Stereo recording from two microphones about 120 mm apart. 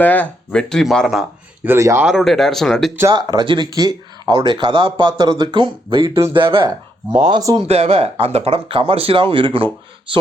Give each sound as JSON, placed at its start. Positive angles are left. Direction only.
{"t": 0.0, "sound": "speech", "side_deg": 10}
{"t": 1.6, "sound": "speech", "side_deg": -20}
{"t": 2.0, "sound": "speech", "side_deg": 0}
{"t": 3.1, "sound": "speech", "side_deg": -35}
{"t": 7.3, "sound": "speech", "side_deg": -30}
{"t": 7.7, "sound": "speech", "side_deg": -55}